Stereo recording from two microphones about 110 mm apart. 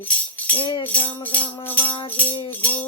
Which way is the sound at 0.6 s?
40° left (ahead or behind).